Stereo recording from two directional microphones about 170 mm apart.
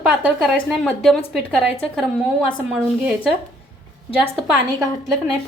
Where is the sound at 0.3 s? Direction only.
Centre (ahead or behind).